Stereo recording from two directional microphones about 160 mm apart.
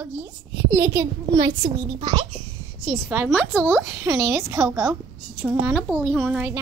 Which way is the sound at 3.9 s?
15° right (ahead or behind).